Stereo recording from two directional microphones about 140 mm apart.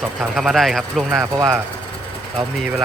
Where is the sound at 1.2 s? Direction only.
20° right (ahead or behind).